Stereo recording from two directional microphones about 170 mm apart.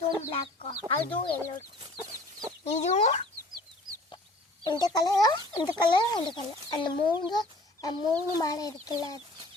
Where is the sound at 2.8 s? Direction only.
40° left (ahead or behind).